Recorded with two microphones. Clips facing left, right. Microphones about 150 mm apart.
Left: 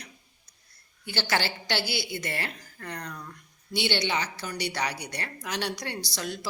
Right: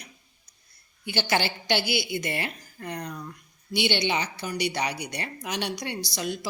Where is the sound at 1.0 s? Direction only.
15° right (ahead or behind).